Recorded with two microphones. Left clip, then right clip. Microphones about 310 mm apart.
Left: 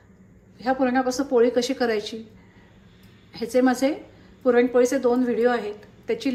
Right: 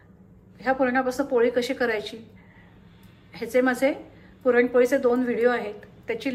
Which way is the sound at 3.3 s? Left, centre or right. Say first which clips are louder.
Left 1 dB; centre.